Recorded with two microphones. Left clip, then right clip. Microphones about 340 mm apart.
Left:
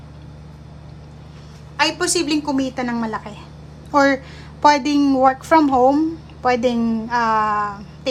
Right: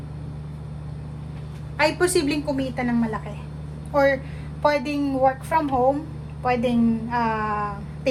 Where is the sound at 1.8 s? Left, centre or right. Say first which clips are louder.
Left 1 dB; centre.